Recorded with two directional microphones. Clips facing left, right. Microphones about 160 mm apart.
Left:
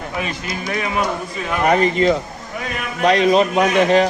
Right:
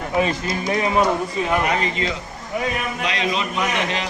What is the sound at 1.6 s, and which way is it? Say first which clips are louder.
A man's voice: left 8 dB; 50° left (ahead or behind).